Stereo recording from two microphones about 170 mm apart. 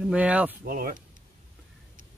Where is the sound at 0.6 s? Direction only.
55° right (ahead or behind).